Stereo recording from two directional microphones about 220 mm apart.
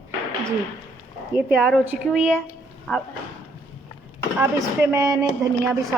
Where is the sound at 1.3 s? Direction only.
5° right (ahead or behind).